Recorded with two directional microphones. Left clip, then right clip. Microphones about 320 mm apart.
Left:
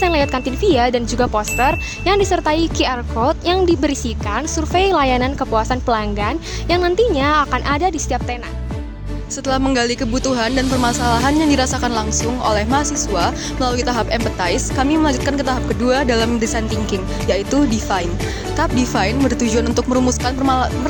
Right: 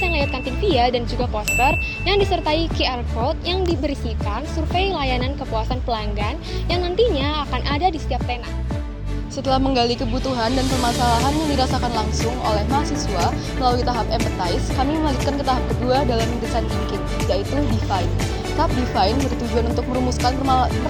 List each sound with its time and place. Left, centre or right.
0.0 s speech: left
9.5 s speech: left
18.6 s speech: left
20.2 s speech: left